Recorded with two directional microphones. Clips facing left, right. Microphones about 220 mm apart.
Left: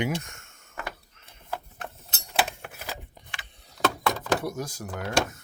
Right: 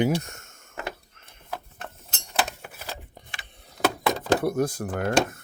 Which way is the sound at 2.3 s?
10° left (ahead or behind).